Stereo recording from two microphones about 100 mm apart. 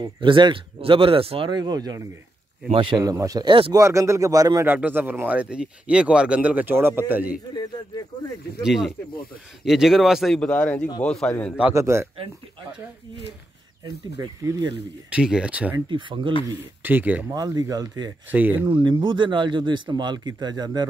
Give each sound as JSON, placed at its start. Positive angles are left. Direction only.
{"t": 0.2, "sound": "speech", "side_deg": -55}
{"t": 1.5, "sound": "speech", "side_deg": -45}
{"t": 2.7, "sound": "speech", "side_deg": -55}
{"t": 3.0, "sound": "speech", "side_deg": -35}
{"t": 4.6, "sound": "speech", "side_deg": -20}
{"t": 8.6, "sound": "a man's voice", "side_deg": -5}
{"t": 11.7, "sound": "a man's voice", "side_deg": -30}
{"t": 14.2, "sound": "speech", "side_deg": -35}
{"t": 15.0, "sound": "speech", "side_deg": -10}
{"t": 15.9, "sound": "speech", "side_deg": -55}
{"t": 16.8, "sound": "speech", "side_deg": -15}
{"t": 17.3, "sound": "speech", "side_deg": -40}
{"t": 18.3, "sound": "speech", "side_deg": -15}
{"t": 18.7, "sound": "speech", "side_deg": -45}